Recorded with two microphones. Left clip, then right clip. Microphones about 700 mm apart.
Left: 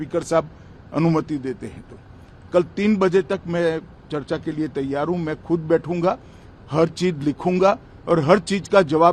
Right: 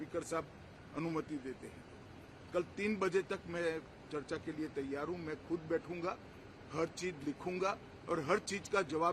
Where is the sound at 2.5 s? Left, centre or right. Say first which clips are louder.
Left 18 dB; left.